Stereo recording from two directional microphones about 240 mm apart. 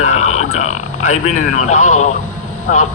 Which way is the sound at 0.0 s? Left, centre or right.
Left.